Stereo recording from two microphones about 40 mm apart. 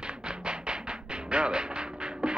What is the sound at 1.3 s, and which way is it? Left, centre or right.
Music, right.